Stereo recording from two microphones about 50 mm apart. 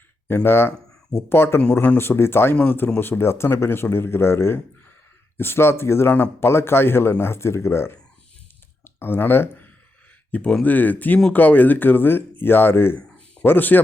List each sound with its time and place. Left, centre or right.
0.4 s speech: left
2.6 s speech: left
3.0 s speech: left
8.8 s speech: left
10.6 s speech: left
13.0 s a sound: left
13.4 s speech: left